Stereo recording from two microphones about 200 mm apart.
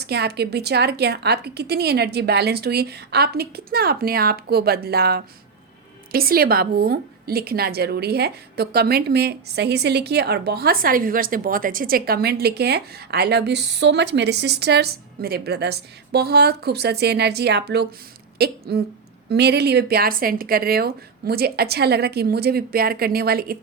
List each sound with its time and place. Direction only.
0.0 s a woman's voice: 55° right (ahead or behind)